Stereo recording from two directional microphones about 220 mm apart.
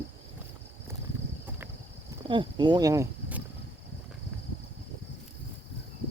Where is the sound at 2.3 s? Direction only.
20° right (ahead or behind).